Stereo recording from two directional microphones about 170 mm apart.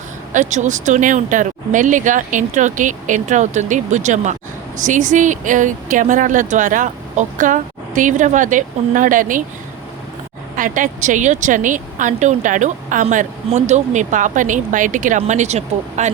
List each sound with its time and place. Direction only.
0.3 s a woman's voice: 45° right (ahead or behind)
10.5 s a woman's voice: 50° right (ahead or behind)